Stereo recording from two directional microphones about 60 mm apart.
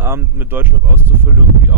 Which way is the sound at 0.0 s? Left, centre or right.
Right.